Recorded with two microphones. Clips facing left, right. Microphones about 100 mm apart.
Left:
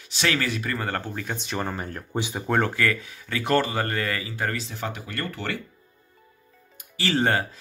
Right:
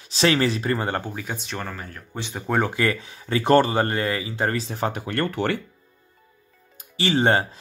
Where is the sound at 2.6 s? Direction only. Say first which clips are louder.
Right 3 dB; 20° right (ahead or behind).